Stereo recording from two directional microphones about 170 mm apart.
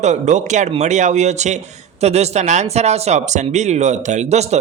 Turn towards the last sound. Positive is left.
turn(degrees=-40)  # may be behind; listen again after turning